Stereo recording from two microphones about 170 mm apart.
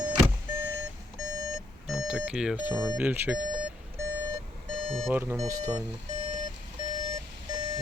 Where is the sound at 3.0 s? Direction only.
5° right (ahead or behind).